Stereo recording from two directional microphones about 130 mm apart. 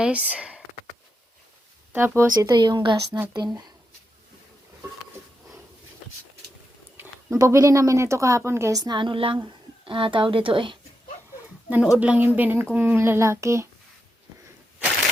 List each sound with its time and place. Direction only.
0.0 s a woman's voice: 10° right (ahead or behind)
1.9 s speech: 15° right (ahead or behind)
2.3 s a woman's voice: 30° right (ahead or behind)
6.9 s a sound: 15° right (ahead or behind)
7.3 s a woman's voice: 25° right (ahead or behind); by 10.8 s 40° right (ahead or behind)
11.9 s a woman's voice: 10° right (ahead or behind)